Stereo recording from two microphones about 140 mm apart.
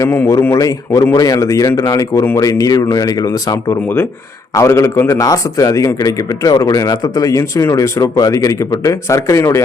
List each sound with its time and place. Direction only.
0.0 s a man's voice: 15° left (ahead or behind)